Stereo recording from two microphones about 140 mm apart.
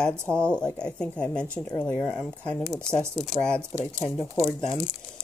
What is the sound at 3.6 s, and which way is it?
Speech, 20° right (ahead or behind).